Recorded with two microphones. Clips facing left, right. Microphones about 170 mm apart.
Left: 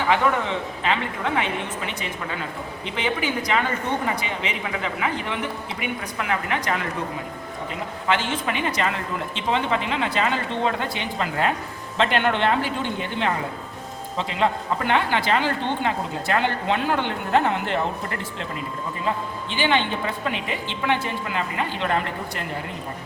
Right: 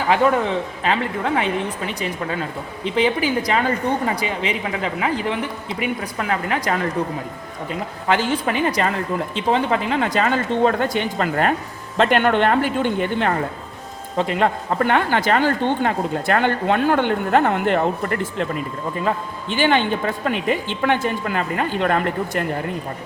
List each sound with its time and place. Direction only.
0.1 s a woman's voice: 40° right (ahead or behind)
8.0 s a woman's voice: 40° right (ahead or behind)